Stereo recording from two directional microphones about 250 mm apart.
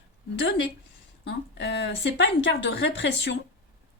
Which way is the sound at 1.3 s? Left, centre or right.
Left.